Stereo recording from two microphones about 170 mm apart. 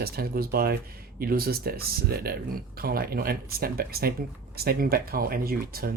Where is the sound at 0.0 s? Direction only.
60° right (ahead or behind).